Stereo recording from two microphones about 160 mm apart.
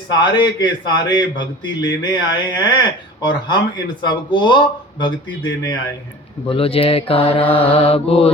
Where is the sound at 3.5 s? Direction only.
25° left (ahead or behind).